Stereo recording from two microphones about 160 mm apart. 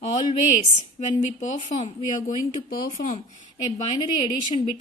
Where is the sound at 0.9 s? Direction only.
50° left (ahead or behind).